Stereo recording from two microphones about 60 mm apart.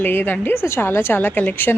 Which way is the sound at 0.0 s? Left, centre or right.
Left.